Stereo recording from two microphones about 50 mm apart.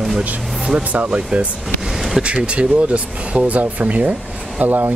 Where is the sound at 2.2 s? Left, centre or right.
Right.